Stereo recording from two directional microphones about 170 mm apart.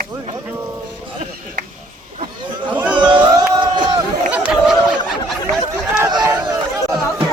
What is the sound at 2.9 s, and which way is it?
Music, 30° right (ahead or behind).